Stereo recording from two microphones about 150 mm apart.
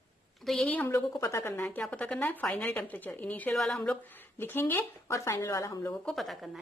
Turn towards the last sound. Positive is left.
turn(degrees=0)  # may be behind; listen again after turning